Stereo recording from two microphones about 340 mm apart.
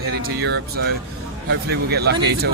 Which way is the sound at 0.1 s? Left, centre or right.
Right.